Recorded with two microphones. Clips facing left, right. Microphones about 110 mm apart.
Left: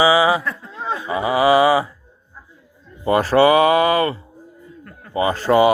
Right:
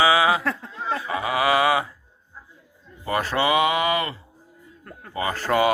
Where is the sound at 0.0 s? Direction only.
5° left (ahead or behind).